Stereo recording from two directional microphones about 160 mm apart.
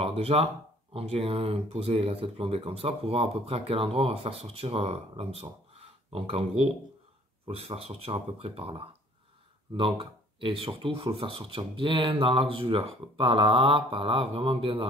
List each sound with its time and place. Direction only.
0.0 s speech: 40° right (ahead or behind)